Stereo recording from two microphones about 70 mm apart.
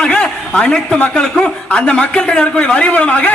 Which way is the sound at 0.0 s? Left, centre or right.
Centre.